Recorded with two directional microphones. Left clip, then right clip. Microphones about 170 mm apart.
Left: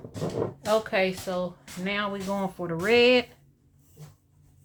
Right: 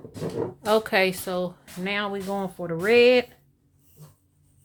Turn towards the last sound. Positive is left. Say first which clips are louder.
# right 3 dB
turn(degrees=-30)  # may be behind; listen again after turning